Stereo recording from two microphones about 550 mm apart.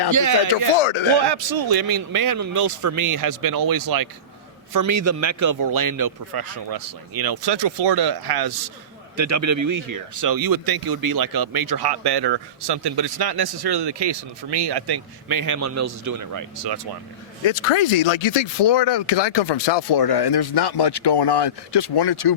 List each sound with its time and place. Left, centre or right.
0.1 s speech: right
0.8 s speech: left
1.2 s speech: right
9.1 s a man's voice: right
17.4 s speech: left